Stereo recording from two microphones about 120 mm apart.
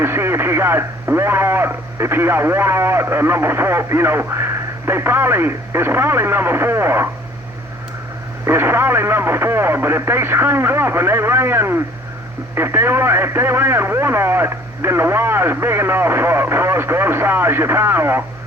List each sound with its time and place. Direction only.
0.0 s speech: 20° right (ahead or behind)
8.4 s speech: 20° right (ahead or behind)